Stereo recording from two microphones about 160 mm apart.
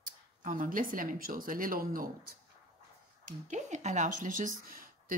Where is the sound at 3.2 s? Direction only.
50° right (ahead or behind).